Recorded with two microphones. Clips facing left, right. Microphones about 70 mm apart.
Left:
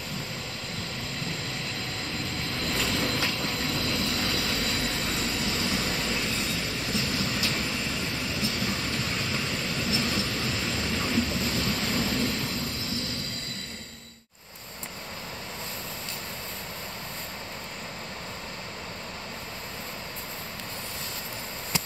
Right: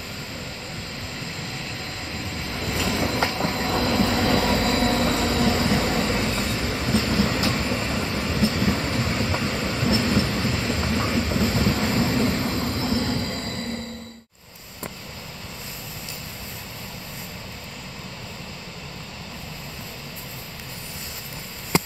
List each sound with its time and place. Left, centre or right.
2.6 s train: centre
3.1 s train: right